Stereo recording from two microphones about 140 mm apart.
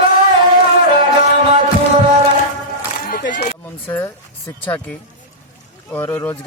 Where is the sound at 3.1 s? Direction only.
70° left (ahead or behind).